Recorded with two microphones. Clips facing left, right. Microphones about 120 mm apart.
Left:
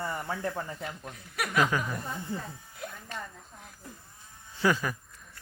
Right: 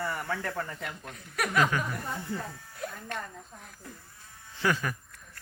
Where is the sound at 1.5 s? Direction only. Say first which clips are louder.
Even; 10° left (ahead or behind).